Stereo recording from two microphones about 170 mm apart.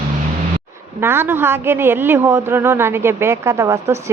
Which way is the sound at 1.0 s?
15° right (ahead or behind).